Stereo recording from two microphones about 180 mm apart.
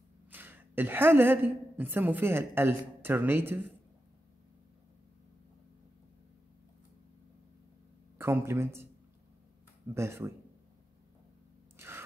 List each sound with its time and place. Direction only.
0.3 s a woman's voice: 10° right (ahead or behind)
8.2 s speech: 15° right (ahead or behind)
9.9 s speech: 15° right (ahead or behind)
11.7 s a sound: 10° right (ahead or behind)